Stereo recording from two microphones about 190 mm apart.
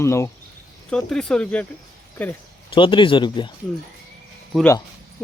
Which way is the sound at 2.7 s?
25° left (ahead or behind).